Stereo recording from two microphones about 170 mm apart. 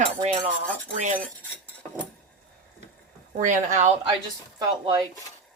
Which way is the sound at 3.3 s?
45° right (ahead or behind).